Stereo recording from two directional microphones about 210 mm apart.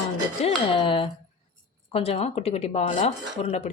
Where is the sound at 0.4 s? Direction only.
25° left (ahead or behind).